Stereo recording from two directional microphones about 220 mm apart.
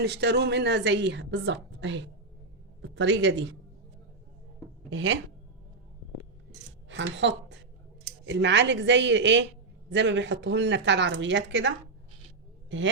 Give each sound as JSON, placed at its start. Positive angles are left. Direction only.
{"t": 0.0, "sound": "a woman's voice", "side_deg": -50}
{"t": 4.9, "sound": "speech", "side_deg": -55}
{"t": 6.8, "sound": "a woman's voice", "side_deg": -55}
{"t": 12.7, "sound": "speech", "side_deg": -60}